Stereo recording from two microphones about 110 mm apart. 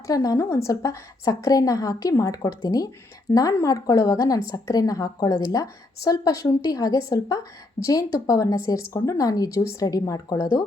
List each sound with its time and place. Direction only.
0.1 s a woman's voice: 35° left (ahead or behind)